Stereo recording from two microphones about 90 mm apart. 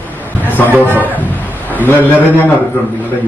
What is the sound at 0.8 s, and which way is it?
A man's voice, 20° left (ahead or behind).